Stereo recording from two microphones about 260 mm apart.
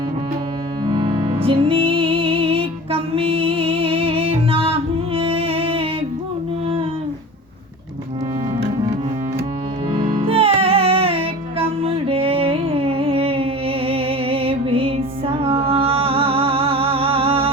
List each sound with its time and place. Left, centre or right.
0.9 s music: centre
9.9 s music: right